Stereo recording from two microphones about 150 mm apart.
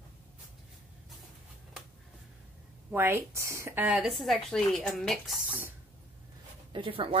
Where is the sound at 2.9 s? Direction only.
15° right (ahead or behind).